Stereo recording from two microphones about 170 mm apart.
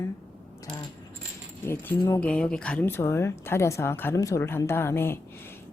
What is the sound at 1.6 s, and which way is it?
Speech, 10° left (ahead or behind).